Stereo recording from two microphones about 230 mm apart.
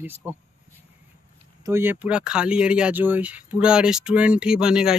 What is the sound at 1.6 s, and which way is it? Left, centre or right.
Speech, centre.